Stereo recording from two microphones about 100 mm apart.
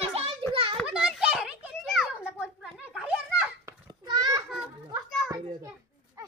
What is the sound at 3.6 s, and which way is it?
Children playing, 40° right (ahead or behind).